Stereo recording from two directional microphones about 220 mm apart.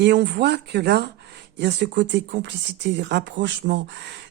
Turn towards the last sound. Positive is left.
turn(degrees=-50)  # may be behind; listen again after turning